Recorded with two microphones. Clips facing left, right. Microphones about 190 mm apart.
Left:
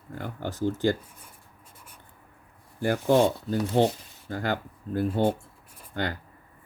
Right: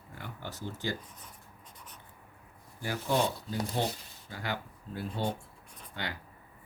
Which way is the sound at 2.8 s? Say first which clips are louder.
Left 9 dB; 55° left (ahead or behind).